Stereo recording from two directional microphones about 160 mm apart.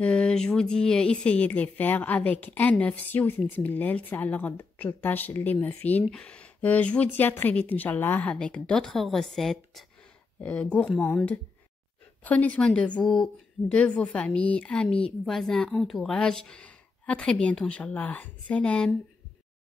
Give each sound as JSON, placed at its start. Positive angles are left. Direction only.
{"t": 0.0, "sound": "speech", "side_deg": 5}